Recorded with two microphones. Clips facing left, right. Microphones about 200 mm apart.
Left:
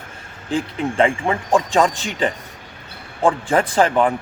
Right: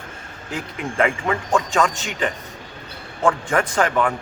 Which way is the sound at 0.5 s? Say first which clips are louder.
Left 5 dB; 30° left (ahead or behind).